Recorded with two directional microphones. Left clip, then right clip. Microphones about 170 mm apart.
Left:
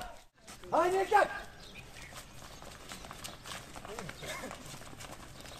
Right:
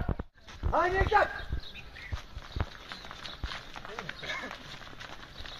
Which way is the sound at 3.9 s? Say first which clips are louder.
Right 5 dB; 35° left (ahead or behind).